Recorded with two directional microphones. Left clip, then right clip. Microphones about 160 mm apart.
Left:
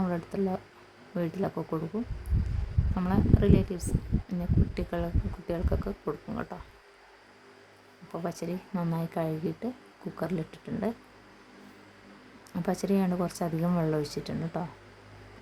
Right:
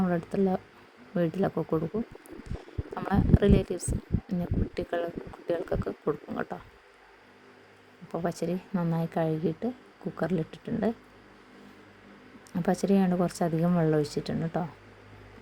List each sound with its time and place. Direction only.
0.0 s speech: 20° right (ahead or behind)
2.9 s speech: 25° right (ahead or behind)
8.1 s speech: 20° right (ahead or behind)
12.6 s speech: 20° right (ahead or behind)